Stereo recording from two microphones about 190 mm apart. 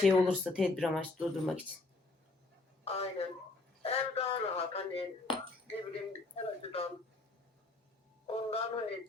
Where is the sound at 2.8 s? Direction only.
30° left (ahead or behind).